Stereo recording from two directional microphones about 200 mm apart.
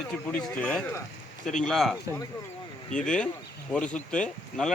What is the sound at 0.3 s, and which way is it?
Speech, 5° left (ahead or behind).